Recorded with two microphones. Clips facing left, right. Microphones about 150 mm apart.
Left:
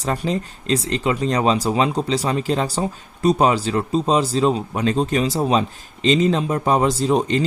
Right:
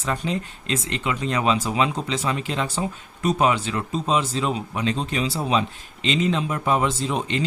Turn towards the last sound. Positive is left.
turn(degrees=40)  # may be behind; listen again after turning